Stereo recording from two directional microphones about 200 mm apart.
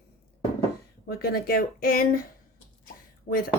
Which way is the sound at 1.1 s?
50° left (ahead or behind).